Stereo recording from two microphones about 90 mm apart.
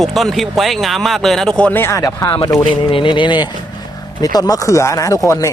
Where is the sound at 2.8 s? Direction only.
65° left (ahead or behind).